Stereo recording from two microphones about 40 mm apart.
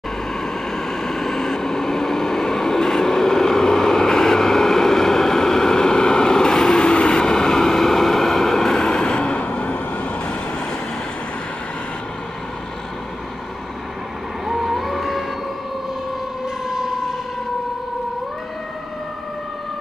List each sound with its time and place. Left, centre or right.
0.7 s vehicle: centre
9.4 s vehicle: left
14.5 s vehicle: centre
16.6 s fire engine: centre